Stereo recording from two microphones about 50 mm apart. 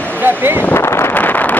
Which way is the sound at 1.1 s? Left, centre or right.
Left.